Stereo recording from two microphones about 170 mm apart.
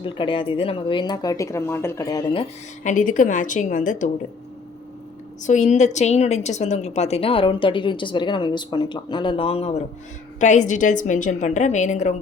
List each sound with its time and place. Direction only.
0.0 s a woman's voice: 30° left (ahead or behind)
2.8 s a woman's voice: 50° left (ahead or behind)
5.4 s a woman's voice: 45° left (ahead or behind)